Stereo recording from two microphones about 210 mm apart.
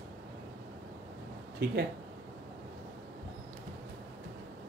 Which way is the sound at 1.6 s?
50° right (ahead or behind).